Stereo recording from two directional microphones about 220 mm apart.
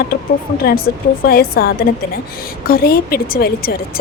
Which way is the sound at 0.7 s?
45° left (ahead or behind).